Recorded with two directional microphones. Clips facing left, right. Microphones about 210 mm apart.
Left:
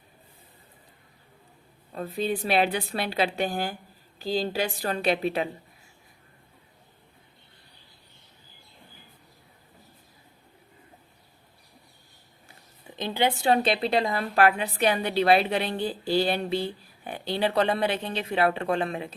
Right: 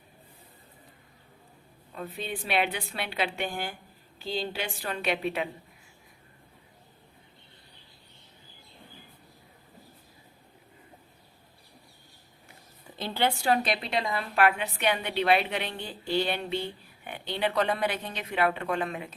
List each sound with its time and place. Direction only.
1.9 s a woman's voice: 35° left (ahead or behind)
13.0 s a woman's voice: 15° left (ahead or behind)